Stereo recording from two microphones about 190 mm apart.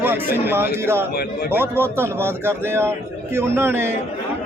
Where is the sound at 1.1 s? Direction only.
55° left (ahead or behind).